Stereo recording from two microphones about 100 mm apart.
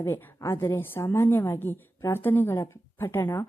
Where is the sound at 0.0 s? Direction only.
30° left (ahead or behind).